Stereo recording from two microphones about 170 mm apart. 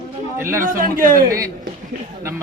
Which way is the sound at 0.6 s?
55° right (ahead or behind).